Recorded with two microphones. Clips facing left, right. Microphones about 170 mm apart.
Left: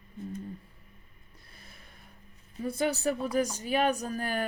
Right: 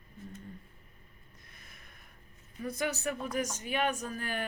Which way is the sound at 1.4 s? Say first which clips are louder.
Left 4 dB; 30° left (ahead or behind).